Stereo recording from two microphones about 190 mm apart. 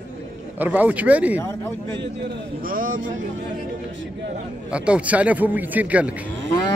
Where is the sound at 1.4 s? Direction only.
10° left (ahead or behind).